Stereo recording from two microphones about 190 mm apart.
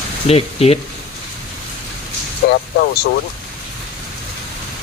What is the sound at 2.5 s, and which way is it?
Speech, 55° left (ahead or behind).